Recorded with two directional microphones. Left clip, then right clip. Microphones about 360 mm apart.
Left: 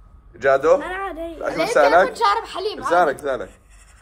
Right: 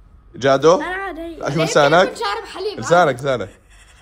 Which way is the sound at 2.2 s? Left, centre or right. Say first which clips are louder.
Left 4 dB; centre.